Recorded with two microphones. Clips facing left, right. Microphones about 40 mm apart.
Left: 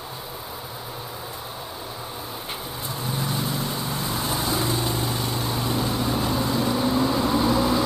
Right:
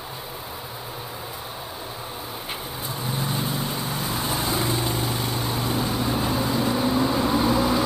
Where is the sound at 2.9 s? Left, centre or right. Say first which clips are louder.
Even; centre.